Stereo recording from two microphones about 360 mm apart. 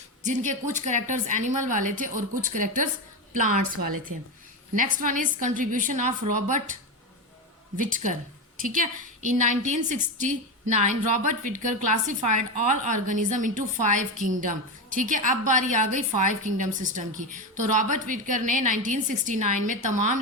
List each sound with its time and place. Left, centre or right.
0.2 s a woman's voice: centre
7.8 s a woman's voice: right